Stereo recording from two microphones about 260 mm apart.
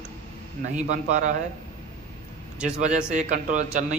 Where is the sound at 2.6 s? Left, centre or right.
Right.